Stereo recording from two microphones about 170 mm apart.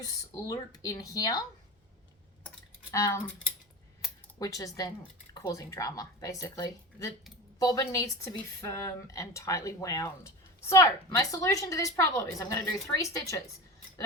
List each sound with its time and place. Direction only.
0.0 s speech: 20° left (ahead or behind)
2.9 s speech: 15° left (ahead or behind)
4.0 s a sound: centre (ahead or behind)
4.4 s speech: 20° left (ahead or behind)